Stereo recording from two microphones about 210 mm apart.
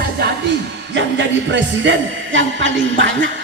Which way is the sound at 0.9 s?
60° right (ahead or behind).